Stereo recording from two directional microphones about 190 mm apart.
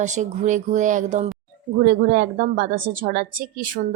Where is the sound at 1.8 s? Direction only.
55° right (ahead or behind).